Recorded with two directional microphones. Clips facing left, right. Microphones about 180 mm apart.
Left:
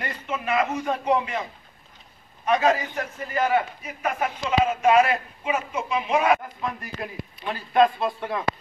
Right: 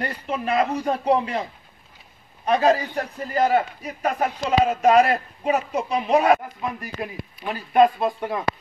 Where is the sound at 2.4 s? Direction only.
35° right (ahead or behind).